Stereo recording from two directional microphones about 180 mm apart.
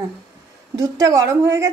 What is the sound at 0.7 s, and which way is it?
Speech, 20° right (ahead or behind).